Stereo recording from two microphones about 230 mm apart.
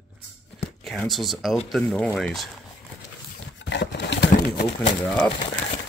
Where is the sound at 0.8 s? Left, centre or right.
Centre.